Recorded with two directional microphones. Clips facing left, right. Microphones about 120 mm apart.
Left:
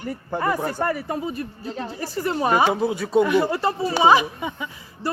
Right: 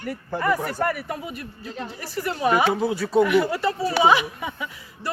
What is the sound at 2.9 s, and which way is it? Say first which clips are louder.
Speech: even; 20° left (ahead or behind).